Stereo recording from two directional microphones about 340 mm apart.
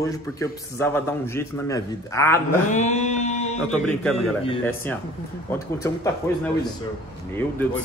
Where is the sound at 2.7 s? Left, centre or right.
Centre.